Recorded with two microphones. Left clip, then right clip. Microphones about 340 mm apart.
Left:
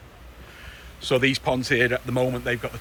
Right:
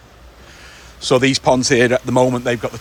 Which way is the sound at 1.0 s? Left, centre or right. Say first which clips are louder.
Right 7 dB; centre.